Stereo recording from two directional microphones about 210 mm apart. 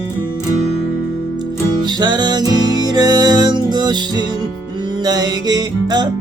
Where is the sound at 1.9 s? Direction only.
20° right (ahead or behind).